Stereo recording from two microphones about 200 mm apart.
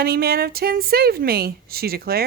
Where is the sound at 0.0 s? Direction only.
50° right (ahead or behind).